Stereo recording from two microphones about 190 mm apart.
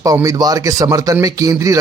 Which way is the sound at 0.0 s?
20° right (ahead or behind).